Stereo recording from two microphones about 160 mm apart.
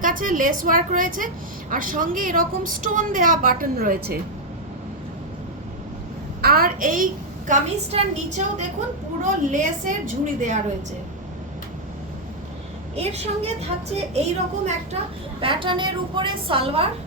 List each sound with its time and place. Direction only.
0.0 s a woman's voice: 55° right (ahead or behind)
6.4 s a woman's voice: 70° right (ahead or behind); by 8.6 s 40° right (ahead or behind)
9.5 s a woman's voice: 55° right (ahead or behind)
13.0 s a woman's voice: 40° right (ahead or behind)
15.4 s a woman's voice: 35° right (ahead or behind)